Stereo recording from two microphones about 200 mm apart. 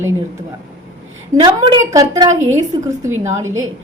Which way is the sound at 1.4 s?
20° right (ahead or behind).